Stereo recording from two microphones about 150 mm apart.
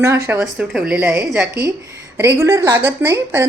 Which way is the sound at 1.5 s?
20° right (ahead or behind).